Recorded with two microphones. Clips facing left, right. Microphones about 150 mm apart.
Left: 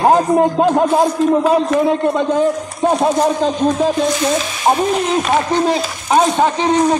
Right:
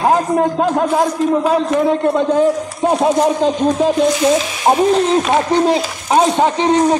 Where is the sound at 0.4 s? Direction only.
20° left (ahead or behind).